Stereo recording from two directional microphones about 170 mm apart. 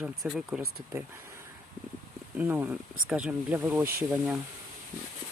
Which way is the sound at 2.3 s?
10° right (ahead or behind).